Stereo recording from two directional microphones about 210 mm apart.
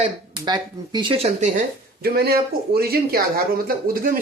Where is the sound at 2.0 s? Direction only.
45° right (ahead or behind).